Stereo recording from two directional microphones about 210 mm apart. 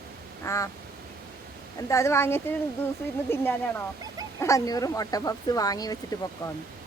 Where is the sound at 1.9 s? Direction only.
15° left (ahead or behind).